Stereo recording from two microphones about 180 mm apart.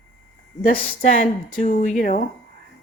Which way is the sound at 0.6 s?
50° left (ahead or behind).